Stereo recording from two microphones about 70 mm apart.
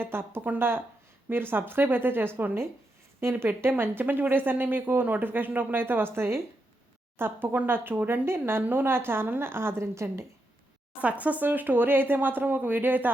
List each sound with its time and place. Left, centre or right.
0.0 s speech: right
11.0 s speech: right